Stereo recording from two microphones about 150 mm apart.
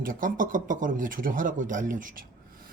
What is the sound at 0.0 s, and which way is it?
Speech, 65° right (ahead or behind).